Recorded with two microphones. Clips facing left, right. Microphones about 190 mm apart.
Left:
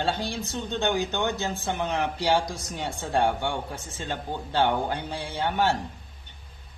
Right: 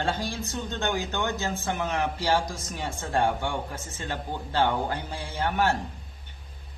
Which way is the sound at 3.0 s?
15° left (ahead or behind).